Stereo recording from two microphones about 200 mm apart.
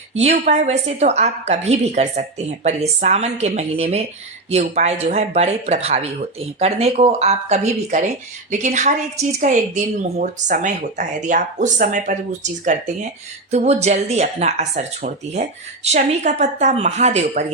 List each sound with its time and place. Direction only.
0.1 s speech: 30° right (ahead or behind)